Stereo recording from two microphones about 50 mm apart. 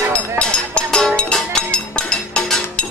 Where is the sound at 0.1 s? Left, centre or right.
Left.